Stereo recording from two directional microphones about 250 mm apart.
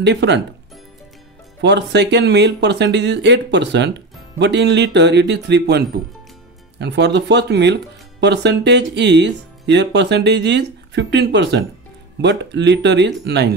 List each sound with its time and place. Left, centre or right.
0.0 s speech: right
1.6 s speech: right